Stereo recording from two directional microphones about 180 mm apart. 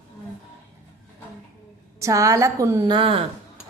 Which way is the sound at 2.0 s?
15° right (ahead or behind).